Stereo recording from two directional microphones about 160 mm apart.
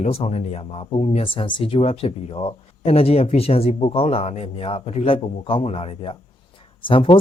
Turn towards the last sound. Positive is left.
turn(degrees=35)  # may be behind; listen again after turning